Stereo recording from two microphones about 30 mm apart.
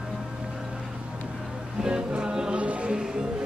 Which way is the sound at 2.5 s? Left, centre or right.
Right.